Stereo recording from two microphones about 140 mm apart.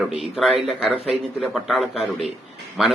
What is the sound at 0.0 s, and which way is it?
A man's voice, centre (ahead or behind).